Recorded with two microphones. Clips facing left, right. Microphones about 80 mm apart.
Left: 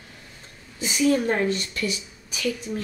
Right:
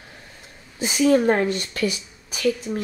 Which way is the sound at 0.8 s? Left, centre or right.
Right.